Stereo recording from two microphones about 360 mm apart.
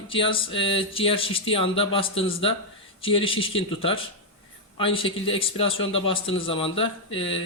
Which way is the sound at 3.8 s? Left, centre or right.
Centre.